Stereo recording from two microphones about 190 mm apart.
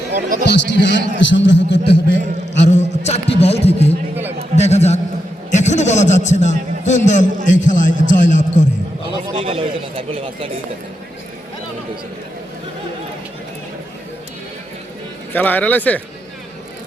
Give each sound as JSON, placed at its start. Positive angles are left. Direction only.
{"t": 0.1, "sound": "a sound", "side_deg": -45}
{"t": 0.4, "sound": "a man's voice", "side_deg": 65}
{"t": 2.6, "sound": "a sound", "side_deg": 35}
{"t": 5.5, "sound": "a man's voice", "side_deg": 40}
{"t": 9.3, "sound": "speech", "side_deg": -30}
{"t": 15.3, "sound": "a man's voice", "side_deg": 10}